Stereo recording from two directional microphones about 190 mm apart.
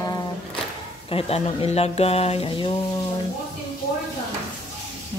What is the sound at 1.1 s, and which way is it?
Speech, 30° left (ahead or behind).